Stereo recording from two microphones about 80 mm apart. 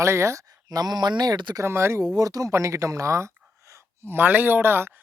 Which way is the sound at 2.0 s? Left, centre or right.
Right.